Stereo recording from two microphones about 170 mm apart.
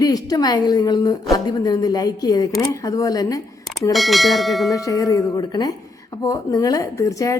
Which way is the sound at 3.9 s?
Centre (ahead or behind).